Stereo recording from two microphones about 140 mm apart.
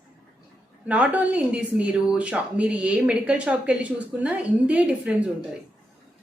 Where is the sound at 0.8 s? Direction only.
10° right (ahead or behind).